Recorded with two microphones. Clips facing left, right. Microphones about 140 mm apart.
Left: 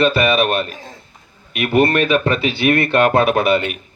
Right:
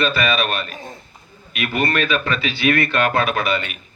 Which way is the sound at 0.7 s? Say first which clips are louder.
Right 1 dB; 25° right (ahead or behind).